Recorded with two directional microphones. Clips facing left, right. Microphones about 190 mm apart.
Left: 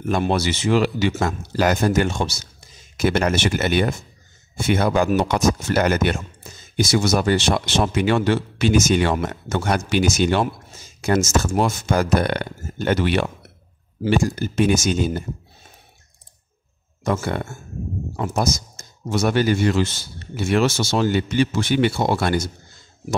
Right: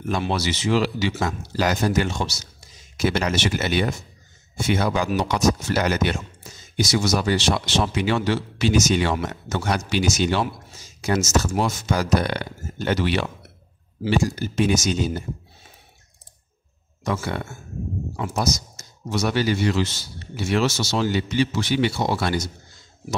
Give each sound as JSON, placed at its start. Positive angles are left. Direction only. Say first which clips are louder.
{"t": 0.1, "sound": "speech", "louder": "left 4 dB", "side_deg": 50}
{"t": 17.0, "sound": "speech", "louder": "left 3 dB", "side_deg": 50}